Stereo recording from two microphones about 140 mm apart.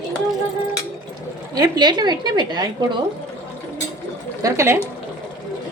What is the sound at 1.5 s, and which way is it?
Speech, 30° right (ahead or behind).